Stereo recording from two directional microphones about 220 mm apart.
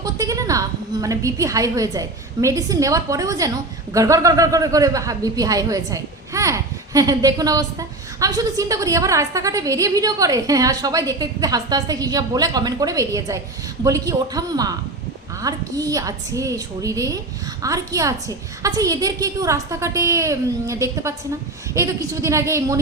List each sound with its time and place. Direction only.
0.0 s a woman's voice: 15° right (ahead or behind)